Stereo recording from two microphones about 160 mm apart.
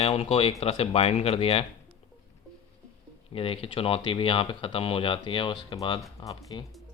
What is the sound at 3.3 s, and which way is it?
Speech, 35° left (ahead or behind).